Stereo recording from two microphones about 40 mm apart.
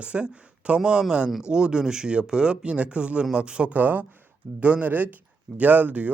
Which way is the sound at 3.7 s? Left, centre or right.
Right.